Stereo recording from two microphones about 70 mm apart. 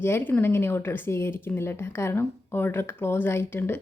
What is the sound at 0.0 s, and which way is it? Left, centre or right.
Speech, left.